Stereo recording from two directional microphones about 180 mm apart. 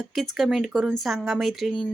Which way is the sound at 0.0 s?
Centre (ahead or behind).